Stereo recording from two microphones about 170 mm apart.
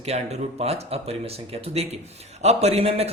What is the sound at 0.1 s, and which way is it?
Speech, 40° right (ahead or behind).